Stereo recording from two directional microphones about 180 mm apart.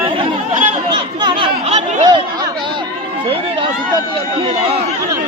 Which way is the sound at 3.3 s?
30° right (ahead or behind).